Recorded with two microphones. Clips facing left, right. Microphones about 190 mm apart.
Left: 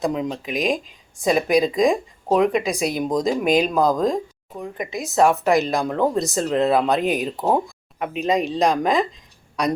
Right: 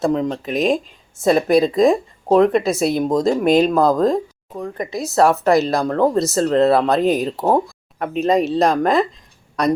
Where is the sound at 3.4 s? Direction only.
10° left (ahead or behind).